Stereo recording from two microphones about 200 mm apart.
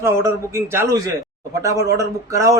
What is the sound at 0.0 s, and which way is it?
A man's voice, 15° right (ahead or behind).